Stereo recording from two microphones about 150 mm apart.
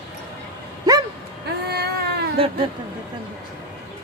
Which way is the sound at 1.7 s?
90° right.